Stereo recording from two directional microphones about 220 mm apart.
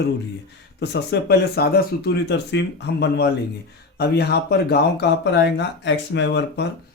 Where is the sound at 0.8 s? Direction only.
50° left (ahead or behind).